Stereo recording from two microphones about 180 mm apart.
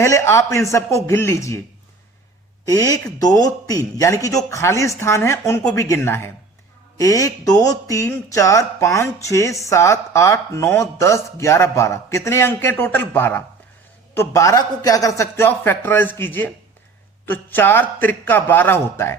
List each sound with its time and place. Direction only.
0.0 s speech: 15° left (ahead or behind)
2.6 s speech: 20° left (ahead or behind)